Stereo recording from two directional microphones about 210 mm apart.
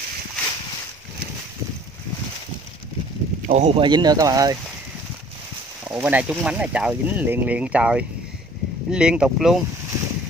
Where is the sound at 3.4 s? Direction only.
35° right (ahead or behind); by 4.5 s 15° right (ahead or behind).